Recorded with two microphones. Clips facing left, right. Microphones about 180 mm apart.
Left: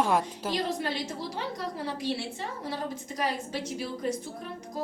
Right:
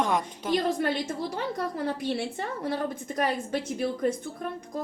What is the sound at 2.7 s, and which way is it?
A woman's voice, 55° right (ahead or behind).